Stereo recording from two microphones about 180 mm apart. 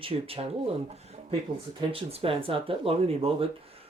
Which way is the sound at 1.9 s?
30° right (ahead or behind).